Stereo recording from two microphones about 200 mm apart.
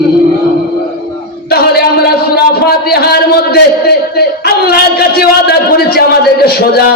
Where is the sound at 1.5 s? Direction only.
50° left (ahead or behind).